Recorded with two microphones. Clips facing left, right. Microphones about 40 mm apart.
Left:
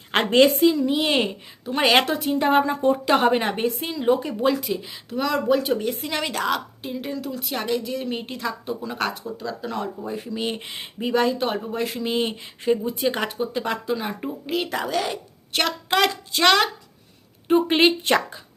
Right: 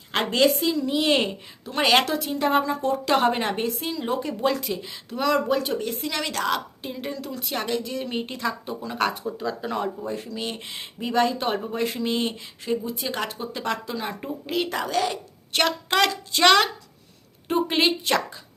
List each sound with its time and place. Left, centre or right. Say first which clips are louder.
0.1 s a woman's voice: left 4 dB; left
0.6 s a woman's voice: left 4 dB; centre
2.0 s speech: left 3 dB; left
3.2 s a woman's voice: left 2 dB; centre
5.8 s speech: left 2 dB; centre
9.2 s speech: right 1 dB; centre
10.0 s speech: left 2 dB; centre
12.3 s speech: left 5 dB; left
13.1 s speech: left 4 dB; centre
17.5 s speech: left 4 dB; centre